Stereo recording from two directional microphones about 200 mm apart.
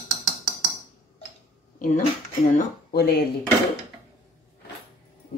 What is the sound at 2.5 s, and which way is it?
Speech, 50° left (ahead or behind).